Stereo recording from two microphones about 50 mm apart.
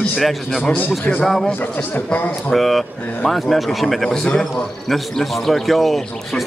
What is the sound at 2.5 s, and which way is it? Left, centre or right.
Speech, centre.